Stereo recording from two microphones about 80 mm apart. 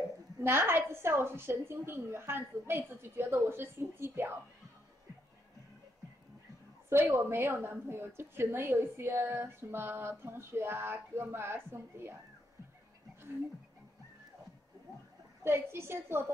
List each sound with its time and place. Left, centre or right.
0.4 s a woman's voice: right
6.9 s a woman's voice: right
15.4 s a woman's voice: right